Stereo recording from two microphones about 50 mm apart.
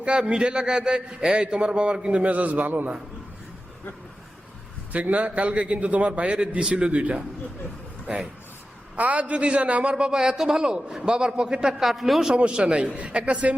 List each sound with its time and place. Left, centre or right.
0.0 s a man's voice: centre; by 2.9 s right
4.9 s a man's voice: right
9.0 s a man's voice: right; by 12.3 s centre
12.3 s a man's voice: right